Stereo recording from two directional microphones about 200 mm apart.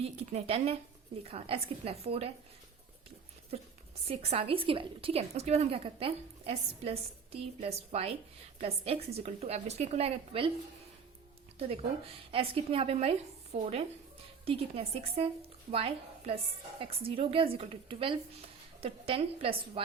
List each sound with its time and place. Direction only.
0.0 s a woman's voice: 30° right (ahead or behind)
4.1 s a woman's voice: 30° right (ahead or behind)
11.7 s a woman's voice: 30° right (ahead or behind)